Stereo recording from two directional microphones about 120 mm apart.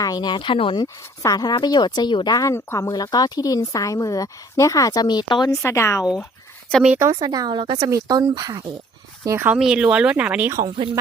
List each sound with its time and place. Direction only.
0.0 s speech: 35° left (ahead or behind)
1.2 s speech: 30° left (ahead or behind)
5.6 s speech: 20° left (ahead or behind)
7.0 s a woman's voice: 35° right (ahead or behind)
7.9 s a woman's voice: 30° right (ahead or behind)
9.5 s speech: 5° right (ahead or behind)